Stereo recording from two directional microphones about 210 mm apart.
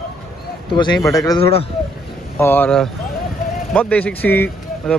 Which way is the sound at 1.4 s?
30° left (ahead or behind).